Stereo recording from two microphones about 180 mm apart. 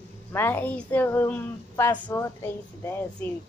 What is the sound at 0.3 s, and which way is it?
A woman's voice, 10° left (ahead or behind).